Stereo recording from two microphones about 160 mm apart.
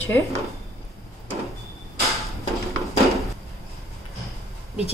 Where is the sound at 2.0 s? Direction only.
Centre (ahead or behind).